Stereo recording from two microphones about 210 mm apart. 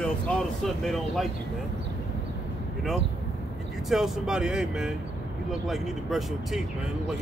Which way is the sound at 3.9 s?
Centre (ahead or behind).